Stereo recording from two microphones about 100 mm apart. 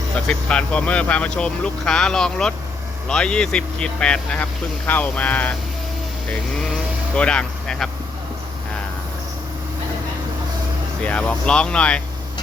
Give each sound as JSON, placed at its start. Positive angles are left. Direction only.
{"t": 0.3, "sound": "speech", "side_deg": 10}
{"t": 7.2, "sound": "speech", "side_deg": 10}
{"t": 11.0, "sound": "speech", "side_deg": 15}